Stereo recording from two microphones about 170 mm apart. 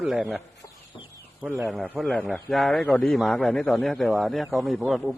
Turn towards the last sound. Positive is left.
turn(degrees=0)  # may be behind; listen again after turning